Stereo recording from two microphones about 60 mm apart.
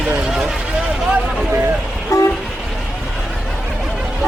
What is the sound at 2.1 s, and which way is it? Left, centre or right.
Train, left.